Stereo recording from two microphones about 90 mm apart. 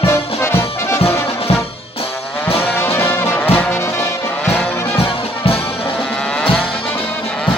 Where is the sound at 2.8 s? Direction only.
25° left (ahead or behind).